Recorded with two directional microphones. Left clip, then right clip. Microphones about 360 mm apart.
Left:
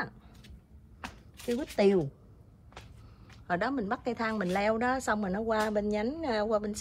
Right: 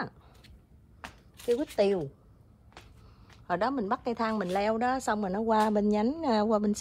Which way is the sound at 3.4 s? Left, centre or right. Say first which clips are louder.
Right 2 dB; centre.